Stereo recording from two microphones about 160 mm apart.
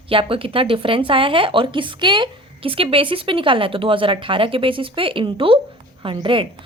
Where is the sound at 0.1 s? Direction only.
35° right (ahead or behind).